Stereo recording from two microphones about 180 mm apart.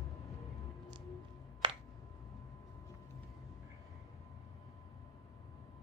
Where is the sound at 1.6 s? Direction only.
30° right (ahead or behind).